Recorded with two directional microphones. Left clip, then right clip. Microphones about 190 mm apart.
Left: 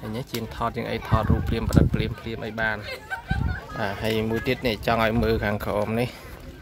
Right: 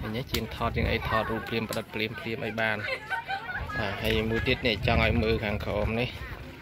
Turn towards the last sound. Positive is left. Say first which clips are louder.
# left 4 dB
turn(degrees=20)  # may be behind; listen again after turning